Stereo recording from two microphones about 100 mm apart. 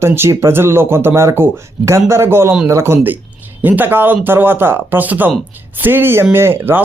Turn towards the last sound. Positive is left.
turn(degrees=-20)  # may be behind; listen again after turning